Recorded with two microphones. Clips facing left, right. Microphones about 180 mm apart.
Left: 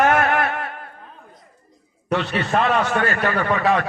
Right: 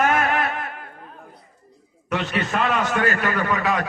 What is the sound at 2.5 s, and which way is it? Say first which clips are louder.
A man's voice: left 4 dB; 40° left (ahead or behind).